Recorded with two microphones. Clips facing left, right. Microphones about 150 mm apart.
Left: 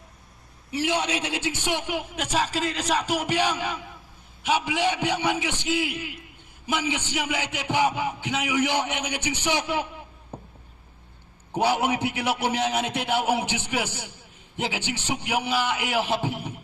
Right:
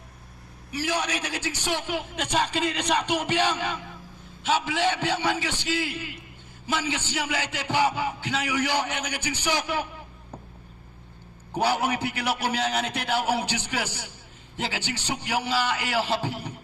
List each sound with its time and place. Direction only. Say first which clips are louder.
0.7 s a man's voice: left 3 dB; 25° left (ahead or behind)
11.5 s a man's voice: left 2 dB; 20° left (ahead or behind)